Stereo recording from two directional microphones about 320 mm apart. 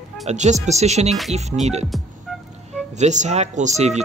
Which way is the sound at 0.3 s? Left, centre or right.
Right.